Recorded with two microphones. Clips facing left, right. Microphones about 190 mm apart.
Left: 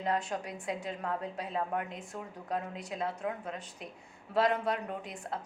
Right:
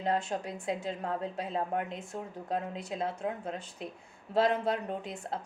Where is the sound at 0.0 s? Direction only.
25° right (ahead or behind).